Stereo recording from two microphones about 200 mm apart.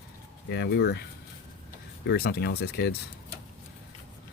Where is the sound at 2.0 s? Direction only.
50° left (ahead or behind).